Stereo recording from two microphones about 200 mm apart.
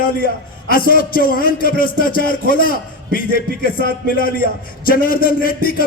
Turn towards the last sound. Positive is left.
turn(degrees=45)  # may be behind; listen again after turning